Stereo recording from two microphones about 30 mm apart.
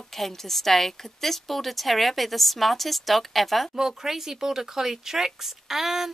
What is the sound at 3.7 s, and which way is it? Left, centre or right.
Speech, centre.